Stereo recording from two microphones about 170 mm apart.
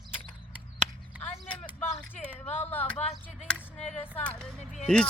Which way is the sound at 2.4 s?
10° left (ahead or behind).